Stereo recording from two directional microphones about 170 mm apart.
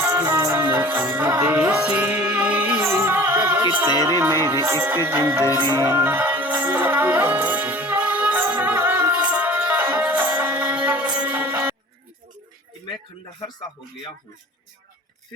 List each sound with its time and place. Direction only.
0.0 s music: 15° right (ahead or behind)
3.9 s speech: 20° left (ahead or behind)
4.4 s music: 15° right (ahead or behind)
5.6 s music: 25° right (ahead or behind)
5.9 s music: 10° right (ahead or behind)